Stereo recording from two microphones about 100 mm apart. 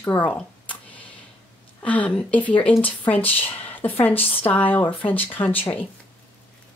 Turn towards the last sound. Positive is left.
turn(degrees=15)  # may be behind; listen again after turning